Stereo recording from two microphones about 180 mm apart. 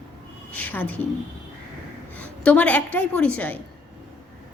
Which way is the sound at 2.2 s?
5° left (ahead or behind).